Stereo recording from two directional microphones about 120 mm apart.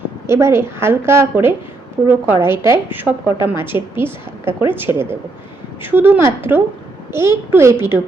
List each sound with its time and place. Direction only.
0.3 s a woman's voice: 20° right (ahead or behind)